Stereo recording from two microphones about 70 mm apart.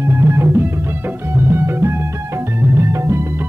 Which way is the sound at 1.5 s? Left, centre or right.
Right.